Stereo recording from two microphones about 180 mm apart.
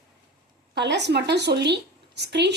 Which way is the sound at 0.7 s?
70° right (ahead or behind).